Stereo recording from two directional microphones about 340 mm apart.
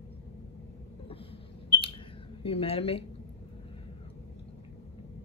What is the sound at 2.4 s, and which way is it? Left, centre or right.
Speech, centre.